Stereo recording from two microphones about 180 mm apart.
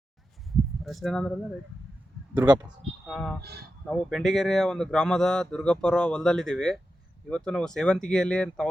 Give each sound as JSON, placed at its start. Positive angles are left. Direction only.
{"t": 0.5, "sound": "a sound", "side_deg": 0}
{"t": 2.3, "sound": "speech", "side_deg": -20}
{"t": 2.6, "sound": "speech", "side_deg": 0}